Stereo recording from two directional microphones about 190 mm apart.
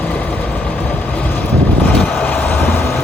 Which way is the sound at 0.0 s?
10° left (ahead or behind).